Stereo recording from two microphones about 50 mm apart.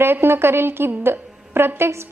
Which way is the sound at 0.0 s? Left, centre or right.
Right.